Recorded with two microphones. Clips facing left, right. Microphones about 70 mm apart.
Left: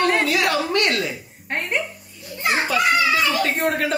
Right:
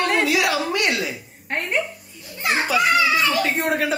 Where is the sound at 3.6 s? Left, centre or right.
Centre.